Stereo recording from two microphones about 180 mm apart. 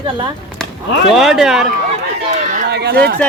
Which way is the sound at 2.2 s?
40° right (ahead or behind).